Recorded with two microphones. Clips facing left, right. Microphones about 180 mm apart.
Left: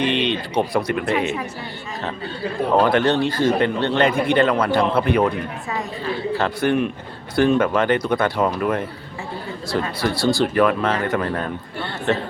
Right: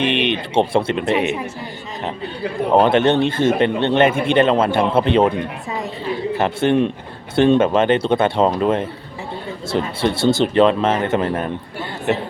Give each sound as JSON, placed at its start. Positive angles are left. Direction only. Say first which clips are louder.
{"t": 0.0, "sound": "speech", "louder": "right 2 dB", "side_deg": -20}
{"t": 2.7, "sound": "speech", "louder": "right 3 dB", "side_deg": -20}
{"t": 6.3, "sound": "a man's voice", "louder": "right 3 dB", "side_deg": -20}